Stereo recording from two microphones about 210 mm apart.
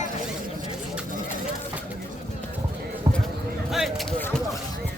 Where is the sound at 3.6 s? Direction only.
Centre (ahead or behind).